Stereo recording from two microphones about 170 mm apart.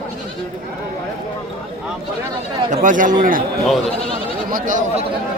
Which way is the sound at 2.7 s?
50° right (ahead or behind).